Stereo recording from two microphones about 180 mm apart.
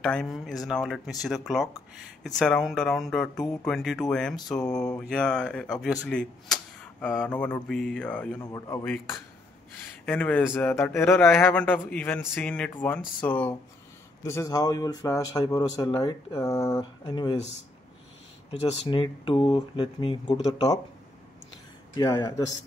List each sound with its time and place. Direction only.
0.0 s speech: centre (ahead or behind)
10.0 s a man's voice: 10° left (ahead or behind)
18.7 s speech: 30° left (ahead or behind)
21.9 s speech: 20° left (ahead or behind)